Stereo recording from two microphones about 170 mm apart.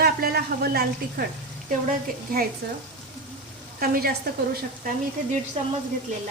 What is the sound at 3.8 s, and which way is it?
Speech, 60° right (ahead or behind).